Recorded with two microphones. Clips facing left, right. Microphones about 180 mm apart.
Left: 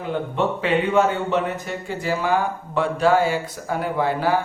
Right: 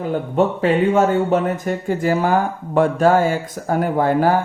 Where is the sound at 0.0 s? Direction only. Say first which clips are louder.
Right 5 dB; 40° right (ahead or behind).